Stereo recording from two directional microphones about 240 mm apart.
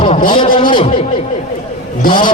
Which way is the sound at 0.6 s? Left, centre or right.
Left.